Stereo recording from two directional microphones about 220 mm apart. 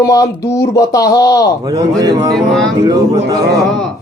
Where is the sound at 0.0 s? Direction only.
15° left (ahead or behind).